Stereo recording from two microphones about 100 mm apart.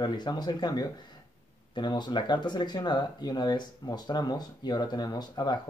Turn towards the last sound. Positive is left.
turn(degrees=45)  # may be behind; listen again after turning